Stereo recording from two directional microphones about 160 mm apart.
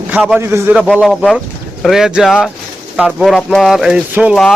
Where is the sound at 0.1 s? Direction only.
Centre (ahead or behind).